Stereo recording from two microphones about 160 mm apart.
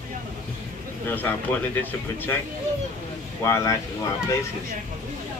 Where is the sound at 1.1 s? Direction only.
10° left (ahead or behind).